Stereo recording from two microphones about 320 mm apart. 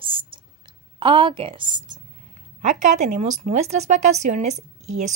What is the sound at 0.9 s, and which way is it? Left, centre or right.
Speech, centre.